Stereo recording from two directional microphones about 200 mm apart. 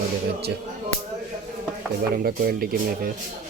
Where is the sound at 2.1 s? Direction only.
45° right (ahead or behind).